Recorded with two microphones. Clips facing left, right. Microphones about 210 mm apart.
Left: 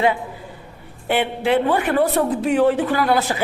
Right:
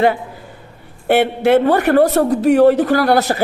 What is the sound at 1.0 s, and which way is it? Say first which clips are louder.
Speech: right 7 dB; 70° right (ahead or behind).